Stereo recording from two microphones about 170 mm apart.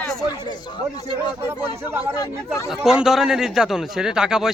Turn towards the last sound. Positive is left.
turn(degrees=-5)  # may be behind; listen again after turning